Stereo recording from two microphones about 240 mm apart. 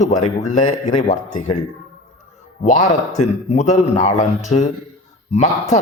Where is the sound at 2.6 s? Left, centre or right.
Left.